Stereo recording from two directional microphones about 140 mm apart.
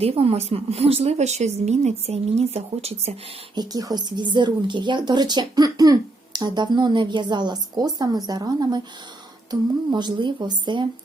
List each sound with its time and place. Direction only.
0.0 s a woman's voice: 45° right (ahead or behind)
3.5 s a woman's voice: 30° right (ahead or behind)